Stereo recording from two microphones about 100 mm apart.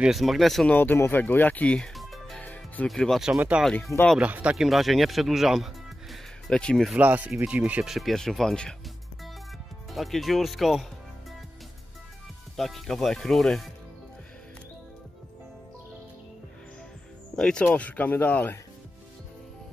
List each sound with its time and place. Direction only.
0.0 s speech: centre (ahead or behind)
0.7 s speech: 20° left (ahead or behind)
2.0 s music: centre (ahead or behind)
2.3 s music: 15° left (ahead or behind)
2.9 s speech: centre (ahead or behind)
3.3 s speech: 15° right (ahead or behind)
4.6 s speech: centre (ahead or behind)
7.0 s speech: 15° right (ahead or behind)
7.9 s speech: centre (ahead or behind)
9.8 s speech: centre (ahead or behind)
12.5 s speech: centre (ahead or behind)
17.4 s speech: 10° left (ahead or behind)